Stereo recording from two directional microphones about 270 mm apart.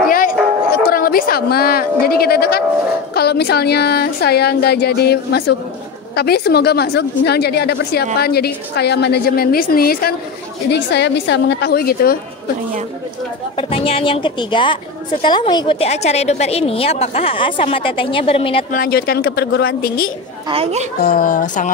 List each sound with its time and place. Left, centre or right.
0.8 s a woman's voice: left
13.6 s a woman's voice: left
18.8 s a woman's voice: left
20.4 s speech: right
21.0 s a woman's voice: left